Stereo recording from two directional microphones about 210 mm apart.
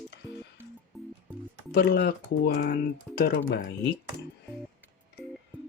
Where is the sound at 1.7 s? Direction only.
50° left (ahead or behind).